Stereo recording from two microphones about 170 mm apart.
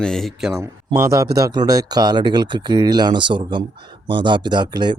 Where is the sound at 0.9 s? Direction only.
20° right (ahead or behind).